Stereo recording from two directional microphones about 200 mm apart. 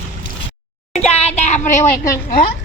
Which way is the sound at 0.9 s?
35° left (ahead or behind).